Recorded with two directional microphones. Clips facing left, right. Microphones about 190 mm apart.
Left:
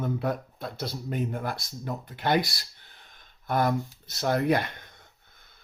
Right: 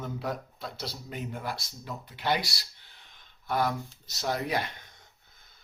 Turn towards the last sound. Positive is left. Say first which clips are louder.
# left 6 dB
turn(degrees=55)  # may be behind; listen again after turning